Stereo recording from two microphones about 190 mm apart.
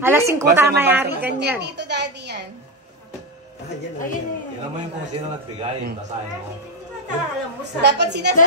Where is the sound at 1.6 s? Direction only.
65° right (ahead or behind).